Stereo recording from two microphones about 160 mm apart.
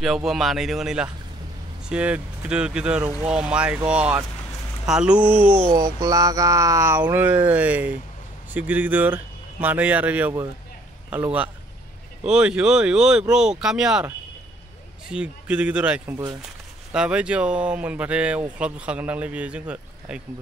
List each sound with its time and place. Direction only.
0.0 s speech: centre (ahead or behind)
5.7 s speech: 25° right (ahead or behind); by 14.0 s 5° right (ahead or behind)
15.0 s speech: 5° right (ahead or behind)